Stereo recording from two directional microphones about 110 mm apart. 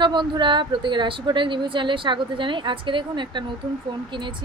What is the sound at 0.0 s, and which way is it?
A woman's voice, 45° right (ahead or behind).